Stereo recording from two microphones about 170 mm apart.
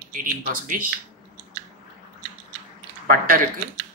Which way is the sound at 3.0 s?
55° right (ahead or behind).